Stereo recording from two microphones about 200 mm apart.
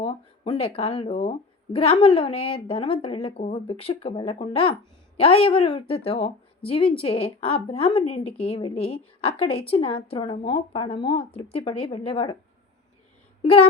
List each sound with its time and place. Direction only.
0.0 s a woman's voice: 30° left (ahead or behind)